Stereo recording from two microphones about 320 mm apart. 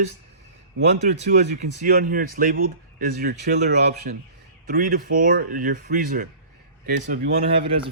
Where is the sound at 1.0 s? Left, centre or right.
Right.